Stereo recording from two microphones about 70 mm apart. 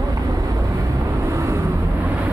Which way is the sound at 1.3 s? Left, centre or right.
Right.